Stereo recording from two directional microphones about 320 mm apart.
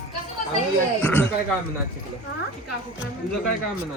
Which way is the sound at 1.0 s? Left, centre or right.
Centre.